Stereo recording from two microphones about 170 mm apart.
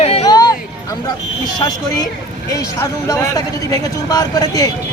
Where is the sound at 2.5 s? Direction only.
20° left (ahead or behind).